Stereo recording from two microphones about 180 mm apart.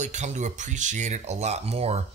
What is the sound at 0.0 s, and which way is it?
Speech, 40° right (ahead or behind).